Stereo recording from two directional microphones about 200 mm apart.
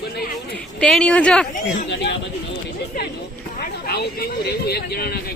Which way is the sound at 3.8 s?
50° left (ahead or behind).